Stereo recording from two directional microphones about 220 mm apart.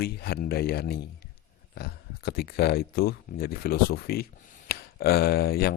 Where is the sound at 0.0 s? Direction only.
45° left (ahead or behind).